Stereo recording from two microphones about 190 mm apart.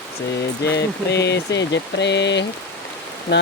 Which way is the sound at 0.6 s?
60° left (ahead or behind).